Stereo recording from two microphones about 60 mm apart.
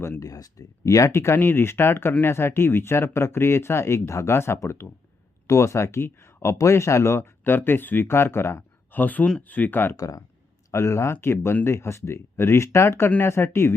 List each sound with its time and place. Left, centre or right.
0.2 s speech: left
1.1 s speech: left
7.4 s speech: left
8.9 s speech: left
10.0 s speech: left
10.7 s speech: left